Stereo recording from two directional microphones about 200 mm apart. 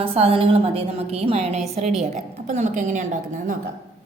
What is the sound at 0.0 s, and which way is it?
A woman's voice, 30° right (ahead or behind).